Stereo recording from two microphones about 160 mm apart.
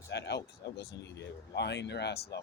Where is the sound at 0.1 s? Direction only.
90° left.